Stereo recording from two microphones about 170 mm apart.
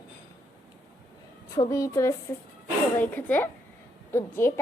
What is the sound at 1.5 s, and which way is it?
A woman's voice, 20° left (ahead or behind).